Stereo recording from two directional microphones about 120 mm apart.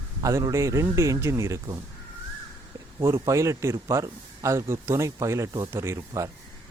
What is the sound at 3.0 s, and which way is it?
A man's voice, 25° right (ahead or behind).